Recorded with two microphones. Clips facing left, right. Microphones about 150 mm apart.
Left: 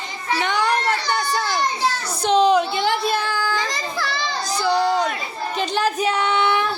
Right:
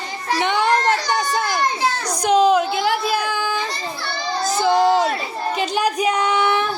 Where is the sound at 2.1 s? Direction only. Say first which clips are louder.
Right 1 dB; 10° right (ahead or behind).